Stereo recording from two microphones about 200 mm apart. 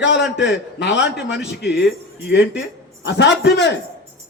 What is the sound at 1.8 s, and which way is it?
Speech, 60° left (ahead or behind).